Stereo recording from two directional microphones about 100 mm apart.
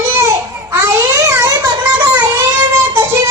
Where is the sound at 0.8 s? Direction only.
30° right (ahead or behind).